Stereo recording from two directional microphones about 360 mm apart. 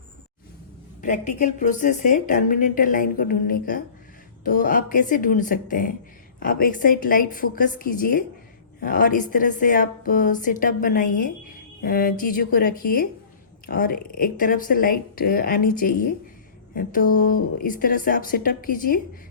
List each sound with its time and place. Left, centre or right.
1.0 s a woman's voice: centre